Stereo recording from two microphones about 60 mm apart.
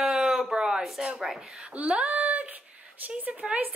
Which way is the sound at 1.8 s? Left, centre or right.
Centre.